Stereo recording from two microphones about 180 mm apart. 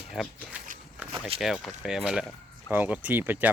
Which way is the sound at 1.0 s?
10° right (ahead or behind).